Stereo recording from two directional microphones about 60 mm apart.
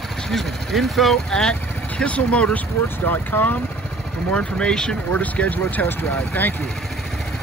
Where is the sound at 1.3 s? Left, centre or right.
Centre.